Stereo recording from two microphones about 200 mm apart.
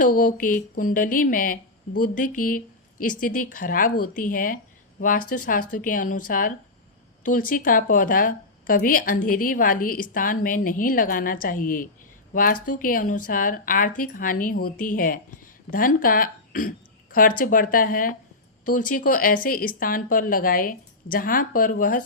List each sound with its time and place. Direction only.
0.0 s speech: 45° left (ahead or behind)